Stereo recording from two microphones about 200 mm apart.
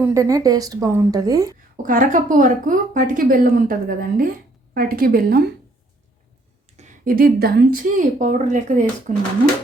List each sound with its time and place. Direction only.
0.0 s speech: 15° right (ahead or behind)
1.7 s a woman's voice: 40° right (ahead or behind)
6.7 s speech: 40° right (ahead or behind)